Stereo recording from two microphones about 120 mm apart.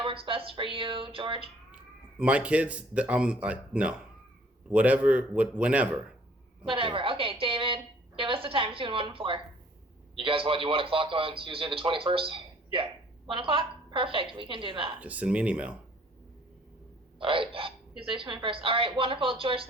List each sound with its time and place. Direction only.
0.0 s a man's voice: 50° right (ahead or behind)
2.1 s speech: 10° right (ahead or behind)
6.7 s a woman's voice: 45° right (ahead or behind)
15.0 s speech: 10° right (ahead or behind)
17.2 s a man's voice: 45° right (ahead or behind)